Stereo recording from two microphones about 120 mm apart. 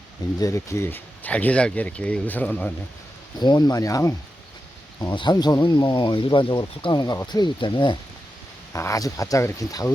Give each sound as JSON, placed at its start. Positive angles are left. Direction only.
{"t": 0.3, "sound": "speech", "side_deg": 30}
{"t": 3.3, "sound": "speech", "side_deg": 35}
{"t": 8.7, "sound": "speech", "side_deg": 25}